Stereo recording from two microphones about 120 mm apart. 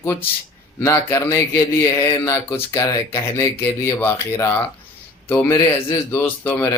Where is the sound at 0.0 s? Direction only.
20° left (ahead or behind).